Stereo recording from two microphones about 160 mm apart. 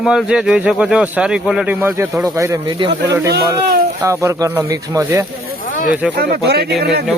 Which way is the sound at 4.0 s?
20° right (ahead or behind).